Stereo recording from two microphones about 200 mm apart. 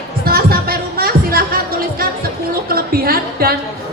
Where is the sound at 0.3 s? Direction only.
50° right (ahead or behind).